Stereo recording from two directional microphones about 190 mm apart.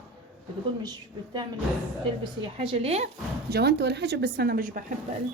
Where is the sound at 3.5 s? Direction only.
60° right (ahead or behind).